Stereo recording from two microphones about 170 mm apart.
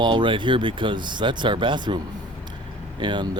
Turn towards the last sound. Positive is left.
turn(degrees=-25)  # may be behind; listen again after turning